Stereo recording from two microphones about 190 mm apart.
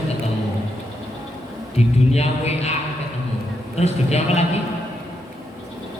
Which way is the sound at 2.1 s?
35° left (ahead or behind).